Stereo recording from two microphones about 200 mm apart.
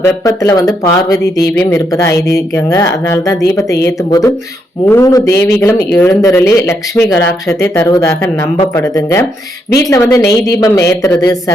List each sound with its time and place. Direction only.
0.3 s speech: 15° left (ahead or behind)